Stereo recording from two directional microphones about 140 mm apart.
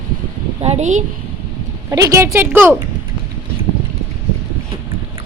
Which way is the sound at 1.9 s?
25° right (ahead or behind).